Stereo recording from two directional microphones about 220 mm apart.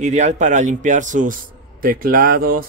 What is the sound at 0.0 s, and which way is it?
Speech, 30° right (ahead or behind).